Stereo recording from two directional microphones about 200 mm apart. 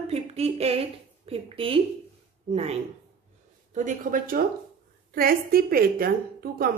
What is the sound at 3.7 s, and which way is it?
A woman's voice, 40° right (ahead or behind).